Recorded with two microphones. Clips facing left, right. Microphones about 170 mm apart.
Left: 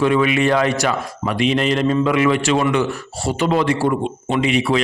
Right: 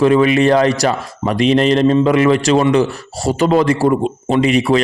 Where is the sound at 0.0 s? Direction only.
35° right (ahead or behind).